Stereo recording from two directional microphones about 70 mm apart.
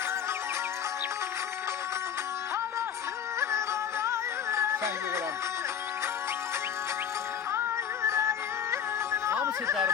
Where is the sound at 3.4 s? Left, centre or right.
Right.